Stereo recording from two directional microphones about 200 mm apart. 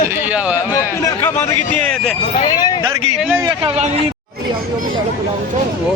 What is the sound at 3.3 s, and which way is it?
Speech, 20° right (ahead or behind).